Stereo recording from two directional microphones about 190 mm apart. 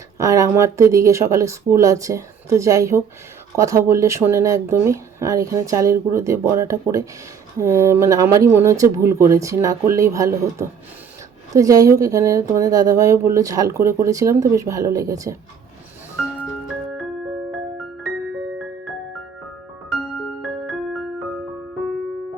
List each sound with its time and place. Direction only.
0.2 s speech: 15° right (ahead or behind)
20.4 s music: centre (ahead or behind)